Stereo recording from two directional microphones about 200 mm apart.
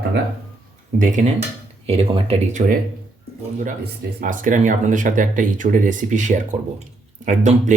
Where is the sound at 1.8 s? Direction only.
30° right (ahead or behind).